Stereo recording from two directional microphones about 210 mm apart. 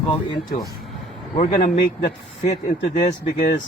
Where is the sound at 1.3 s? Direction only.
35° left (ahead or behind).